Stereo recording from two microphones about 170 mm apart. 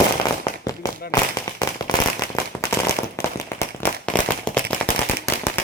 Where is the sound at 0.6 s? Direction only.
20° left (ahead or behind).